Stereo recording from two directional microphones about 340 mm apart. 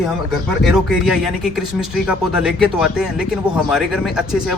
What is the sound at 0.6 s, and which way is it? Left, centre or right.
Speech, centre.